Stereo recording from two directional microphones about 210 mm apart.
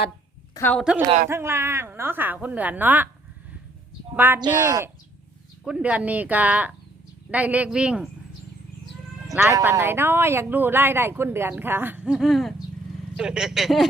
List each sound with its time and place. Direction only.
0.5 s speech: 10° left (ahead or behind)
1.3 s speech: 10° right (ahead or behind)
4.1 s speech: 10° right (ahead or behind)
5.6 s speech: 5° right (ahead or behind)
9.5 s speech: 15° right (ahead or behind)